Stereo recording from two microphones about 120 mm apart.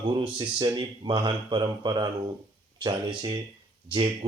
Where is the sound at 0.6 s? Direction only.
35° right (ahead or behind).